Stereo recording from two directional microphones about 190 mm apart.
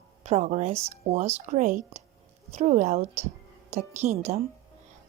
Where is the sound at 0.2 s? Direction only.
35° right (ahead or behind).